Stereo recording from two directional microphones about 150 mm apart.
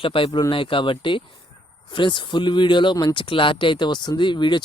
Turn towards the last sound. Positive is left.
turn(degrees=30)  # may be behind; listen again after turning